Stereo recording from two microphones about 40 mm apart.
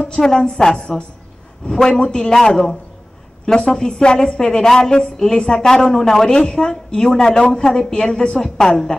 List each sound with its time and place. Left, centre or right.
0.1 s speech: centre